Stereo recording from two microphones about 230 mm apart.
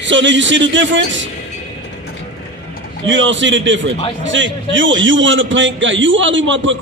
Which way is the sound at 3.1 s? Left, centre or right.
Right.